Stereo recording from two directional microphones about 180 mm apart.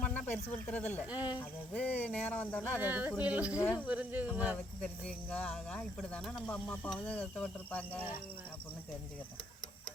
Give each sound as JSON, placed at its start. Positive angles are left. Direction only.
{"t": 0.0, "sound": "snake", "side_deg": 10}
{"t": 0.5, "sound": "speech", "side_deg": 10}
{"t": 1.2, "sound": "speech", "side_deg": 20}
{"t": 1.7, "sound": "speech", "side_deg": 10}
{"t": 2.6, "sound": "speech", "side_deg": -10}
{"t": 3.6, "sound": "speech", "side_deg": 10}
{"t": 3.8, "sound": "speech", "side_deg": -10}
{"t": 4.5, "sound": "speech", "side_deg": 5}